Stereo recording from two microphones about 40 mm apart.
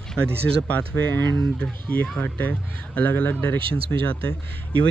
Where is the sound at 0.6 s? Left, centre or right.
Left.